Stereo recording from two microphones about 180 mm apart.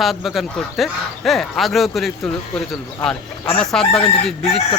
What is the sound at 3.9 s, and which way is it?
Crowing, 35° left (ahead or behind).